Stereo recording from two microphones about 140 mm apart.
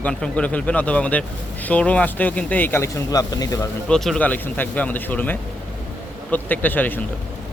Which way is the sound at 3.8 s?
5° left (ahead or behind).